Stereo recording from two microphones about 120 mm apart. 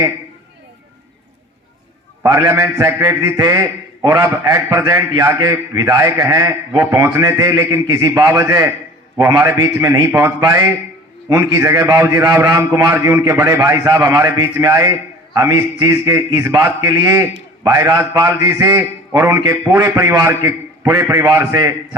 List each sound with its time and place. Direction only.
2.2 s a man's voice: 30° right (ahead or behind)